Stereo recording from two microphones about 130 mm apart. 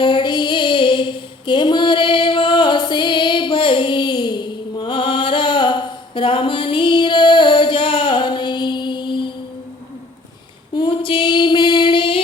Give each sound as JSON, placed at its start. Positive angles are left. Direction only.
{"t": 0.0, "sound": "music", "side_deg": 35}
{"t": 10.8, "sound": "female singing", "side_deg": 40}